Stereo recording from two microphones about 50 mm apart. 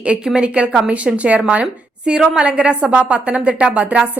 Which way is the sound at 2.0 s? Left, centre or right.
Centre.